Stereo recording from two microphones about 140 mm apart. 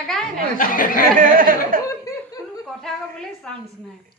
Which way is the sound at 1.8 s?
25° left (ahead or behind).